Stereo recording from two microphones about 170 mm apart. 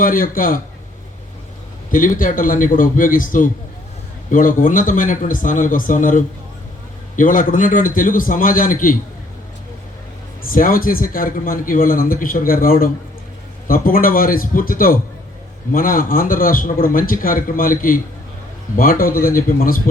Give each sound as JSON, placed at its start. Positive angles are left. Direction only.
{"t": 0.0, "sound": "speech", "side_deg": 55}
{"t": 1.9, "sound": "speech", "side_deg": 50}
{"t": 10.4, "sound": "a man's voice", "side_deg": 55}